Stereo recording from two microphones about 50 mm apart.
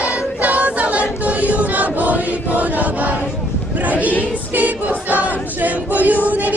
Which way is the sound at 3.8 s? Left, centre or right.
Right.